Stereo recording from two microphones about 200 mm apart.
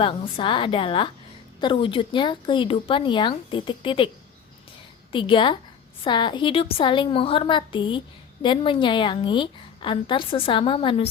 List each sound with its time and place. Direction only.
0.0 s a woman's voice: 25° left (ahead or behind)
5.1 s a woman's voice: 25° left (ahead or behind)